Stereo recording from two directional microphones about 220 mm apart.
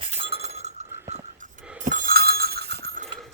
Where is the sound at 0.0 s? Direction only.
25° right (ahead or behind).